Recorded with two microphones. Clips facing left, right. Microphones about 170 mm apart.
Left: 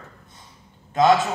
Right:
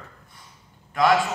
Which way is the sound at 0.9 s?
20° left (ahead or behind).